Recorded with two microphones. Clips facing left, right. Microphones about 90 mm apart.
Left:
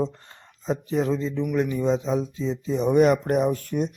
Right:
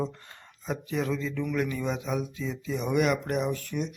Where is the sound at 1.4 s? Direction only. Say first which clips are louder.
Left 6 dB; 20° left (ahead or behind).